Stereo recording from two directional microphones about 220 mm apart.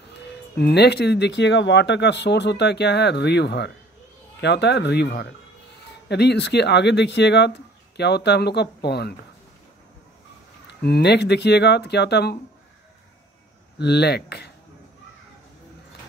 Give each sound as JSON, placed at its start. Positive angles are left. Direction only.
{"t": 0.6, "sound": "speech", "side_deg": 45}
{"t": 10.7, "sound": "speech", "side_deg": 50}
{"t": 13.7, "sound": "speech", "side_deg": 50}